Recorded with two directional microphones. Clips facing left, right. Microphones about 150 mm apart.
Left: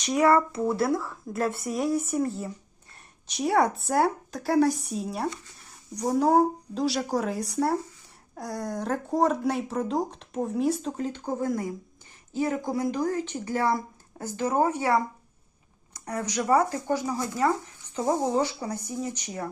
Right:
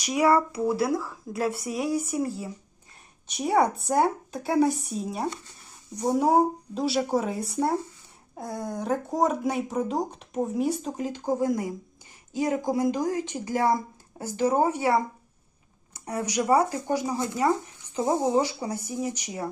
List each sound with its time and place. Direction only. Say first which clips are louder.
0.0 s speech: left 1 dB; centre (ahead or behind)
8.4 s speech: even; 25° right (ahead or behind)
8.6 s speech: right 2 dB; centre (ahead or behind)
14.8 s speech: right 1 dB; 20° right (ahead or behind)
16.2 s speech: right 1 dB; 10° right (ahead or behind)